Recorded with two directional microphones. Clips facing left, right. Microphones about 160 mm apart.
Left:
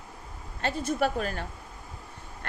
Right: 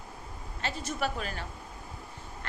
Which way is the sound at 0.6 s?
50° left (ahead or behind).